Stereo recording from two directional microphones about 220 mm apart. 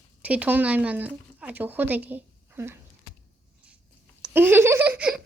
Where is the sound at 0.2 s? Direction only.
5° right (ahead or behind).